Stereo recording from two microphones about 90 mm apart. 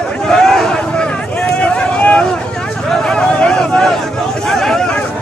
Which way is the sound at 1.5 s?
10° left (ahead or behind).